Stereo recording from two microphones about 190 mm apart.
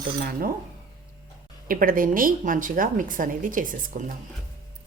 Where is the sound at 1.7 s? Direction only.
50° right (ahead or behind).